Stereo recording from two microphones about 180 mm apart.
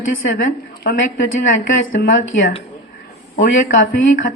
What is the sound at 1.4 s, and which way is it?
A woman's voice, 45° left (ahead or behind).